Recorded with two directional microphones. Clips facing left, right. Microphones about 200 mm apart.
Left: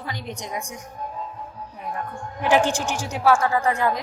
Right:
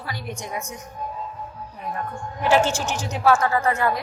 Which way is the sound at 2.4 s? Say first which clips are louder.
Even; 15° left (ahead or behind).